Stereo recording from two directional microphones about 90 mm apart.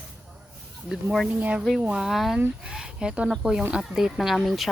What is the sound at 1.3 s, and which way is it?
Speech, 15° right (ahead or behind).